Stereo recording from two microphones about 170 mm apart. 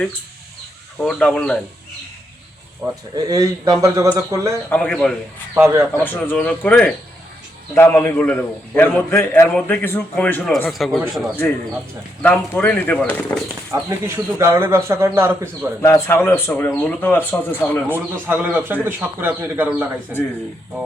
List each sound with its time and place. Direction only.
0.9 s speech: 5° left (ahead or behind)
2.8 s speech: 20° right (ahead or behind)
4.7 s a man's voice: 5° left (ahead or behind)
5.5 s speech: 15° right (ahead or behind)
6.0 s a man's voice: 10° left (ahead or behind)
12.2 s a man's voice: 10° left (ahead or behind)
13.7 s speech: 15° right (ahead or behind)
15.8 s a man's voice: 15° left (ahead or behind)
17.8 s speech: 10° right (ahead or behind)